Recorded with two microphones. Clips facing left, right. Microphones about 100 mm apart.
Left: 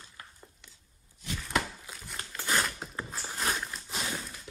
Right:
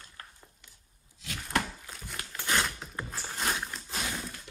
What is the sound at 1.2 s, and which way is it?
Chopping, 90° right.